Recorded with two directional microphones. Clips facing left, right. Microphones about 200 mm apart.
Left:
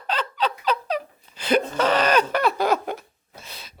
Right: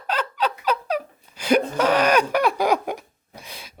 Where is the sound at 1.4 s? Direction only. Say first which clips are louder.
Right 2 dB; 10° right (ahead or behind).